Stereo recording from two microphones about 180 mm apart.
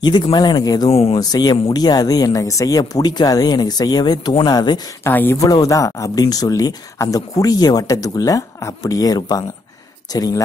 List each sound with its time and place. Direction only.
0.0 s speech: 25° left (ahead or behind)
0.8 s speech: 35° left (ahead or behind)